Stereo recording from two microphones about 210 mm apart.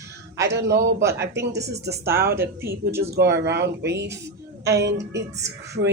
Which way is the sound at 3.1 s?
55° right (ahead or behind).